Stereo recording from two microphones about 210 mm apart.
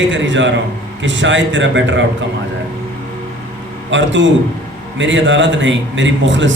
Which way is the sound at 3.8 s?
60° right (ahead or behind).